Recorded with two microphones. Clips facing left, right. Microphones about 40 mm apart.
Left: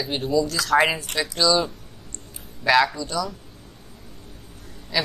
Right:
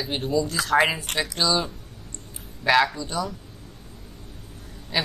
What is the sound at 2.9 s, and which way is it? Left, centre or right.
Speech, right.